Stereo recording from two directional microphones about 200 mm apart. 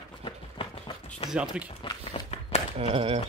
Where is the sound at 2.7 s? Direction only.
30° right (ahead or behind).